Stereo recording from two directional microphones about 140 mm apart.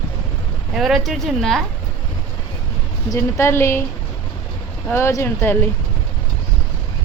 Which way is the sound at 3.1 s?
20° left (ahead or behind).